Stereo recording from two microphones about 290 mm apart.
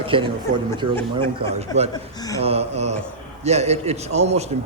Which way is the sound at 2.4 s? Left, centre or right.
Right.